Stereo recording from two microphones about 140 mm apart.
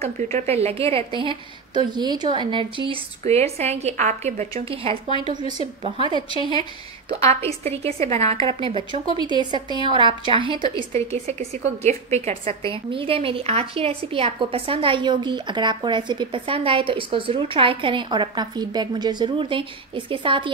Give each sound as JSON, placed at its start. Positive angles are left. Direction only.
{"t": 0.0, "sound": "a woman's voice", "side_deg": -50}
{"t": 6.1, "sound": "a woman's voice", "side_deg": 35}
{"t": 7.1, "sound": "a woman's voice", "side_deg": -45}
{"t": 10.9, "sound": "a woman's voice", "side_deg": -50}
{"t": 12.9, "sound": "a woman's voice", "side_deg": -40}